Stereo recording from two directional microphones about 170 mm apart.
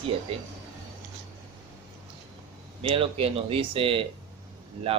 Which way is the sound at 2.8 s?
30° right (ahead or behind).